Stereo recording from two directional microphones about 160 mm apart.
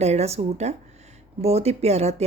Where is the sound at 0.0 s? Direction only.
40° right (ahead or behind).